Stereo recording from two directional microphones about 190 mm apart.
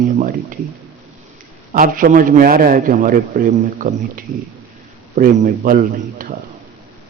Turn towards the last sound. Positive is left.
turn(degrees=-45)  # may be behind; listen again after turning